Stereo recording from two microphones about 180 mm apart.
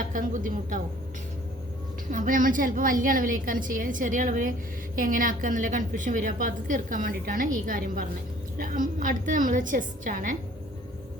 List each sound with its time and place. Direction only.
0.1 s a woman's voice: 50° right (ahead or behind)
2.0 s a woman's voice: 50° right (ahead or behind)